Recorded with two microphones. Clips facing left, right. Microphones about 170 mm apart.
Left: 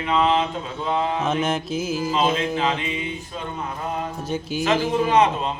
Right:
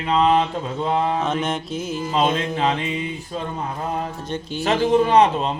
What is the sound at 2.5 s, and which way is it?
Mantra, 35° right (ahead or behind).